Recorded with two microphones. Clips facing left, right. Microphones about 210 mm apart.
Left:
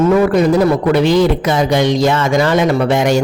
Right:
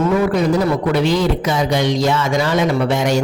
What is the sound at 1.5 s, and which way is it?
Speech, 50° left (ahead or behind).